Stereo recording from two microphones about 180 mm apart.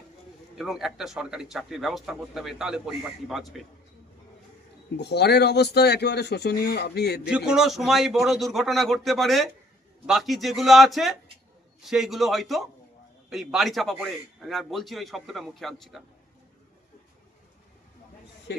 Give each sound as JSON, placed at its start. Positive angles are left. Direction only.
{"t": 0.5, "sound": "speech", "side_deg": 0}
{"t": 4.9, "sound": "a man's voice", "side_deg": 65}
{"t": 7.3, "sound": "speech", "side_deg": -5}